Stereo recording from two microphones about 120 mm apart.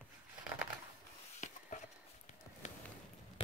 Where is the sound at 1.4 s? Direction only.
90° left.